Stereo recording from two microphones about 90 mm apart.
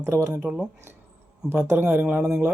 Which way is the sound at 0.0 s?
30° right (ahead or behind).